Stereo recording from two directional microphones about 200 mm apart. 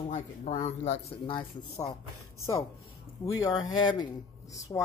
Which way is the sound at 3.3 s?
20° left (ahead or behind).